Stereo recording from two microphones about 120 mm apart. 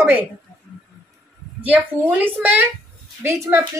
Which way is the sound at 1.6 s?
15° right (ahead or behind).